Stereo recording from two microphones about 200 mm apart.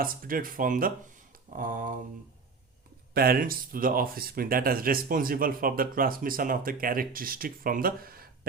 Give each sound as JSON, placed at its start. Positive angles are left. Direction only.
{"t": 0.0, "sound": "speech", "side_deg": -45}
{"t": 1.5, "sound": "a sound", "side_deg": -40}
{"t": 3.2, "sound": "speech", "side_deg": -50}